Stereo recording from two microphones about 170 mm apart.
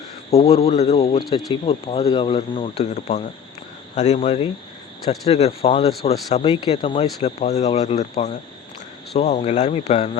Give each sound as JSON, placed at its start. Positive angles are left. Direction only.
{"t": 0.3, "sound": "speech", "side_deg": 35}